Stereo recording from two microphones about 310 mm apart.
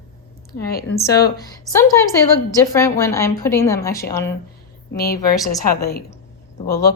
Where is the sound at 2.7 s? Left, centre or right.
Centre.